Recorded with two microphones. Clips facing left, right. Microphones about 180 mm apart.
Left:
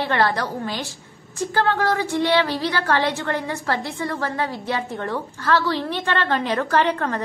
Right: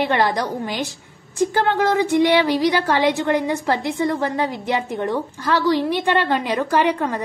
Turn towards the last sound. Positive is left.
turn(degrees=-10)  # may be behind; listen again after turning